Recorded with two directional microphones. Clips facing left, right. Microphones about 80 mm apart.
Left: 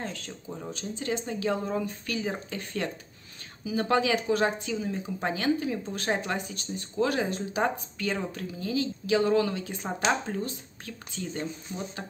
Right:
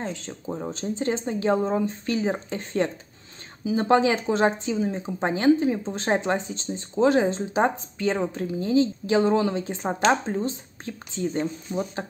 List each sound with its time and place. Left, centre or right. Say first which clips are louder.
0.0 s speech: right 5 dB; right